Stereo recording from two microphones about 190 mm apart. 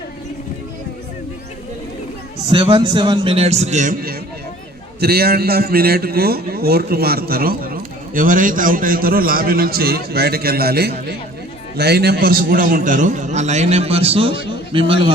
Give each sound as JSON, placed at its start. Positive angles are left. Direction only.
{"t": 2.5, "sound": "a man's voice", "side_deg": -25}